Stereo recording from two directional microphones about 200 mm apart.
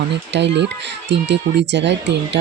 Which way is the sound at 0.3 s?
60° right (ahead or behind).